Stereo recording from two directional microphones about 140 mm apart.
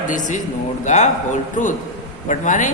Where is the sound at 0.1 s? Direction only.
65° left (ahead or behind).